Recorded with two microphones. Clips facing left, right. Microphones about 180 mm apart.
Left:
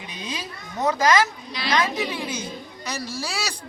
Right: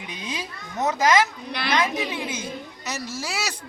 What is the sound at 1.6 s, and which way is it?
Speech, 60° right (ahead or behind).